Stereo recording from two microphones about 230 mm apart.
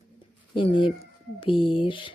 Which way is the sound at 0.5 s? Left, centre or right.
Left.